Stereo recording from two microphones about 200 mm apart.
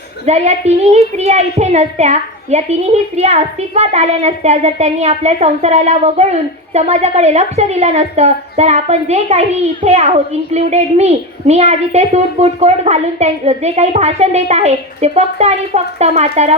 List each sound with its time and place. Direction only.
0.3 s a child's voice: 35° right (ahead or behind)